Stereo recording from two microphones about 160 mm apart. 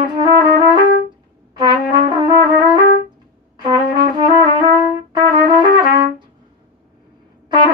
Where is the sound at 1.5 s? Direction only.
30° right (ahead or behind).